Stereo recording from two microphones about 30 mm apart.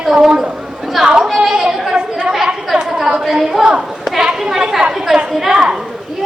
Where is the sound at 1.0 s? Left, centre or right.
Right.